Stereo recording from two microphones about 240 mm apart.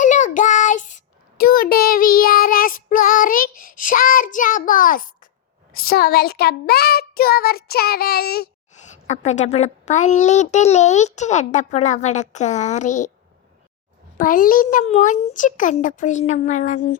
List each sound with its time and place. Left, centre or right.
0.0 s child singing: left
5.7 s a child's voice: left
9.0 s a child's voice: left
14.2 s a child's voice: left